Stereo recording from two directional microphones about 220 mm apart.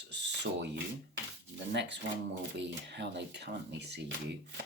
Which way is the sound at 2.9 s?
50° right (ahead or behind).